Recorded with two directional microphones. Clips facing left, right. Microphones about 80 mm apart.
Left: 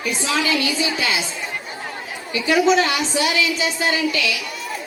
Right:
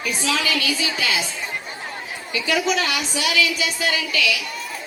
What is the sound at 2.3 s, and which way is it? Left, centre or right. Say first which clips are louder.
A woman's voice: left 5 dB; left.